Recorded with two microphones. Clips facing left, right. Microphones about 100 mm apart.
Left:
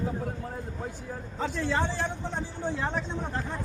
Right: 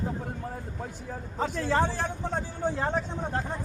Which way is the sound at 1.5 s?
50° right (ahead or behind).